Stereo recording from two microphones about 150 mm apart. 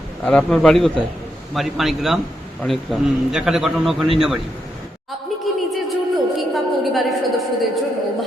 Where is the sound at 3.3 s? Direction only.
Centre (ahead or behind).